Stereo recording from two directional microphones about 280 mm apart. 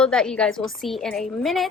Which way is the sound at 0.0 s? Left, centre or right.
Centre.